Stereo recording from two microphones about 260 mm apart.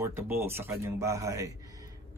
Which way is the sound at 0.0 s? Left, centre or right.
Centre.